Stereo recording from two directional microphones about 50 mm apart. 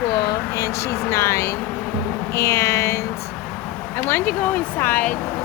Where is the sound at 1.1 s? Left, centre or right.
Left.